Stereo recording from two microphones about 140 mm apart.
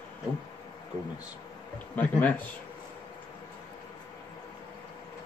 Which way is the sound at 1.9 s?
10° left (ahead or behind).